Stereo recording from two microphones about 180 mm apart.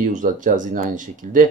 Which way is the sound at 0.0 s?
45° right (ahead or behind).